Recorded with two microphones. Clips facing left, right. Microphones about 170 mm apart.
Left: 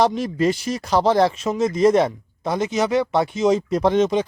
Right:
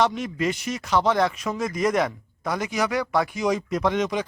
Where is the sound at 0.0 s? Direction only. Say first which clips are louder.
Left 5 dB; 35° left (ahead or behind).